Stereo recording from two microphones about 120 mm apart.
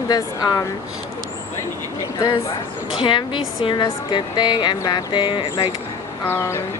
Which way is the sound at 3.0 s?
40° left (ahead or behind).